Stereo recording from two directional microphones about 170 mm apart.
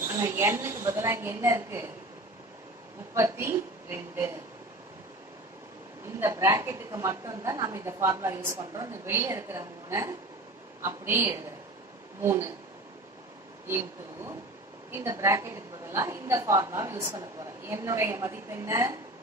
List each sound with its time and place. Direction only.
0.1 s a woman's voice: 15° right (ahead or behind)
3.2 s a woman's voice: 15° right (ahead or behind)
6.1 s a woman's voice: 15° right (ahead or behind)
13.7 s a woman's voice: 15° right (ahead or behind)